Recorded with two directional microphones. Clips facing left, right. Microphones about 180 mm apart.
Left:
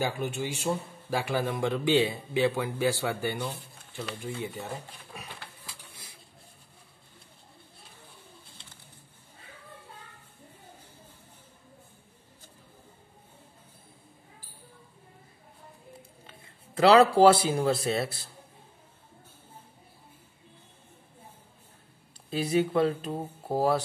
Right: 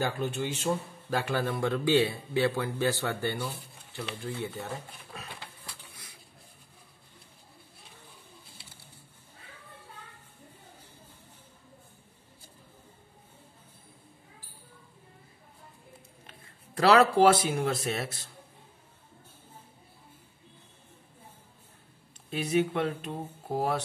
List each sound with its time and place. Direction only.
0.0 s speech: 10° left (ahead or behind)
16.3 s speech: 25° left (ahead or behind)
22.3 s speech: 35° left (ahead or behind)